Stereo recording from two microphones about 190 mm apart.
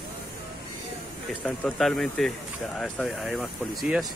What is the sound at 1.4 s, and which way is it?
Speech, 5° left (ahead or behind).